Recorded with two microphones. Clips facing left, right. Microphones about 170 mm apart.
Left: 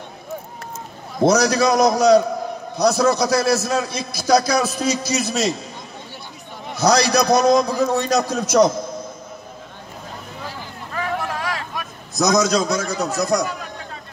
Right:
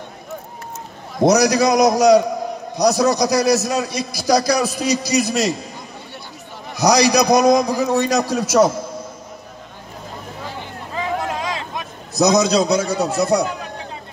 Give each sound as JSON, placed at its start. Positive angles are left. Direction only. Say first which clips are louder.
{"t": 1.2, "sound": "a man's voice", "louder": "right 2 dB", "side_deg": -15}
{"t": 6.8, "sound": "a man's voice", "louder": "right 2 dB", "side_deg": -15}
{"t": 10.9, "sound": "a sound", "louder": "right 2 dB", "side_deg": -20}